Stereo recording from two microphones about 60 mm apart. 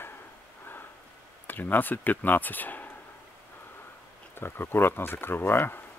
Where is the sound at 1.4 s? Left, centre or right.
Left.